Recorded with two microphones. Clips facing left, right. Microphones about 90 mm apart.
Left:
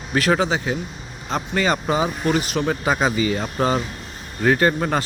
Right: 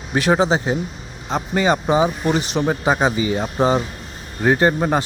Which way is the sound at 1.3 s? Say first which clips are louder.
Right 3 dB; 15° right (ahead or behind).